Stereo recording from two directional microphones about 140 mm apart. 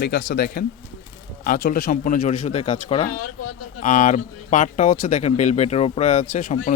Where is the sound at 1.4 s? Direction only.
90° left; by 2.2 s 70° left (ahead or behind).